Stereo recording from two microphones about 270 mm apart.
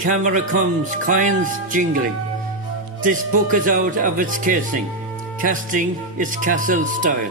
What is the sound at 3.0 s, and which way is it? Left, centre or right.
Speech, right.